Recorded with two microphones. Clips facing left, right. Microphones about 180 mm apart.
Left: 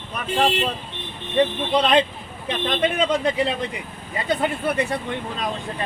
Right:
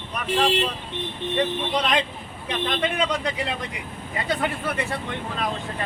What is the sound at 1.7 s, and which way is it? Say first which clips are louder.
Speech: left 5 dB; 25° left (ahead or behind).